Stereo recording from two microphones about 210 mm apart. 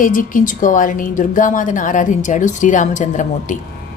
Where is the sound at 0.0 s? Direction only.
40° left (ahead or behind).